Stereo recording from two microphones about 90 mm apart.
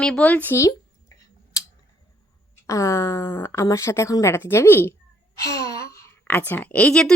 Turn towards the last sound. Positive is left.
turn(degrees=10)  # may be behind; listen again after turning